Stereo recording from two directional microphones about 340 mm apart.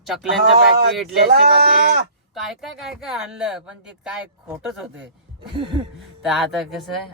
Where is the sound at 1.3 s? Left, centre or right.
Right.